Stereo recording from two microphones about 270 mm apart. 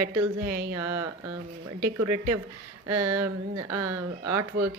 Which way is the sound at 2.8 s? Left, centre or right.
Centre.